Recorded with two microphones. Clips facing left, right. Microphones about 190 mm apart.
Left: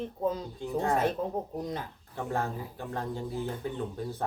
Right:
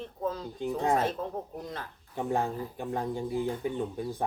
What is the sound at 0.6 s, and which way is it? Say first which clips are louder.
Speech: right 8 dB; 15° right (ahead or behind).